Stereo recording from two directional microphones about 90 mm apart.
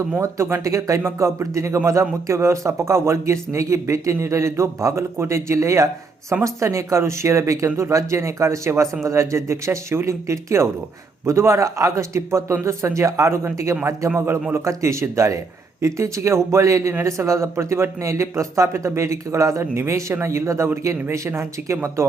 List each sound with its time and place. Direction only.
0.2 s speech: 30° right (ahead or behind)